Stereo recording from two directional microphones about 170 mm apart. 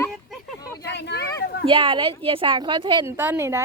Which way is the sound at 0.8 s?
90° left.